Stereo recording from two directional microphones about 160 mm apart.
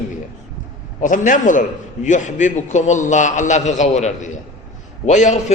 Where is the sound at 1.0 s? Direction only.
55° left (ahead or behind).